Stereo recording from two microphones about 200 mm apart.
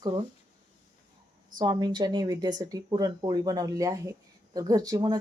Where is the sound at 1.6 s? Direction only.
20° right (ahead or behind).